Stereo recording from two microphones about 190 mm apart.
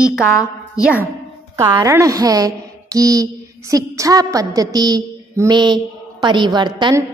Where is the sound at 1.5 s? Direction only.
15° right (ahead or behind).